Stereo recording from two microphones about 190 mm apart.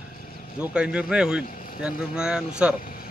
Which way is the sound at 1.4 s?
45° left (ahead or behind).